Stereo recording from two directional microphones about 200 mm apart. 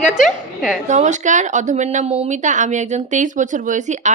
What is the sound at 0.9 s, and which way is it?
A woman's voice, 35° right (ahead or behind).